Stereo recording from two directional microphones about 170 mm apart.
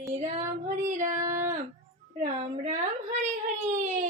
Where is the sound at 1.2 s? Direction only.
15° right (ahead or behind).